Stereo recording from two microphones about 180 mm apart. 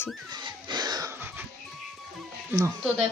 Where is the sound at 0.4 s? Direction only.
25° right (ahead or behind).